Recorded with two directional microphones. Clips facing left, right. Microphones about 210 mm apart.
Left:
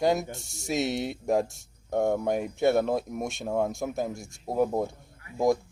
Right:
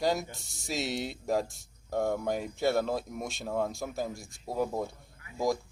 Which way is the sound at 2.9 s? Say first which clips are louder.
Left 5 dB; 50° left (ahead or behind).